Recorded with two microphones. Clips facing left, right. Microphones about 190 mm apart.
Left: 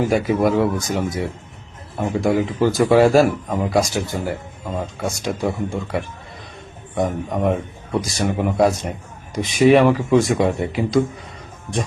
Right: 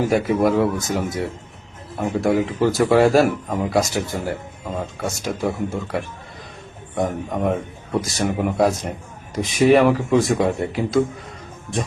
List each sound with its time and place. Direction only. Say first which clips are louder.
0.0 s speech: even; 5° left (ahead or behind)